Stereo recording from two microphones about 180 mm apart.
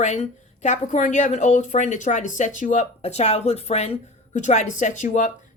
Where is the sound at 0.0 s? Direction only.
40° left (ahead or behind).